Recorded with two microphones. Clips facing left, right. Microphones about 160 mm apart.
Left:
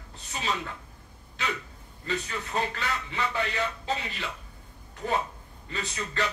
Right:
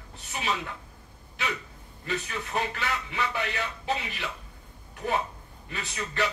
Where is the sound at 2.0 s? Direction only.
15° right (ahead or behind).